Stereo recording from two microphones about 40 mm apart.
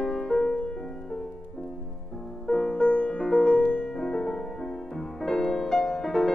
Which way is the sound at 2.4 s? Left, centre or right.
Left.